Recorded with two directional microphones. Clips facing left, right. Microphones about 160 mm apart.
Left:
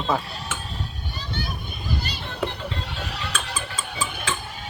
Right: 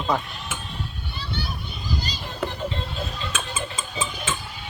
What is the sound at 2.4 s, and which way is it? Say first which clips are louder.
Music: left 1 dB; 5° left (ahead or behind).